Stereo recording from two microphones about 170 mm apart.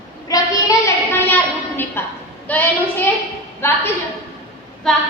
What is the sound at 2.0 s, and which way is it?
Speech, 15° left (ahead or behind).